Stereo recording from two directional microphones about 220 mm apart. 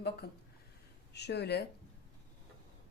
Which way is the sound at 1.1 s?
50° left (ahead or behind).